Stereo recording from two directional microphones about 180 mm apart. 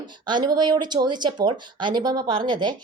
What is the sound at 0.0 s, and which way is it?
Speech, 25° right (ahead or behind).